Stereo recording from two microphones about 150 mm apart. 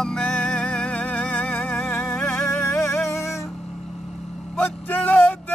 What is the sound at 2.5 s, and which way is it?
Music, 15° left (ahead or behind).